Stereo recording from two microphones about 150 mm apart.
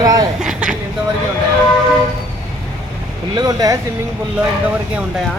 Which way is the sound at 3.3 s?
25° right (ahead or behind).